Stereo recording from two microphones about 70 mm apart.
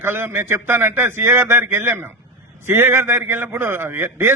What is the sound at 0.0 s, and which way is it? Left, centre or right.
A man's voice, right.